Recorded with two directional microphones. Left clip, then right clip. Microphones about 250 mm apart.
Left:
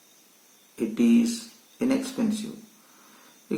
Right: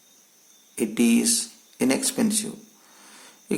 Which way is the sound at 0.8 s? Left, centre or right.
Right.